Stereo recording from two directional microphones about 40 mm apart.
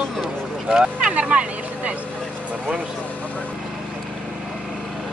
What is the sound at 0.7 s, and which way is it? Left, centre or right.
Speech, centre.